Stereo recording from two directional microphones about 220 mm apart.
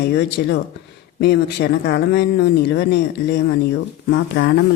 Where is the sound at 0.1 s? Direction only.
50° left (ahead or behind).